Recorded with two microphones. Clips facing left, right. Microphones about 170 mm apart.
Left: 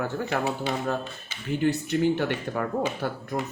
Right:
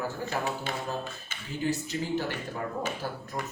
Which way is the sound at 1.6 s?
65° left (ahead or behind).